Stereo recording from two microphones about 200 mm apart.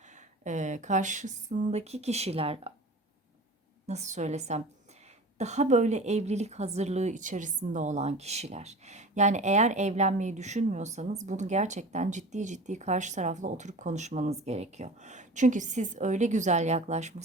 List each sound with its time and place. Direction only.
0.0 s a woman's voice: 35° right (ahead or behind)
3.8 s a woman's voice: 35° right (ahead or behind)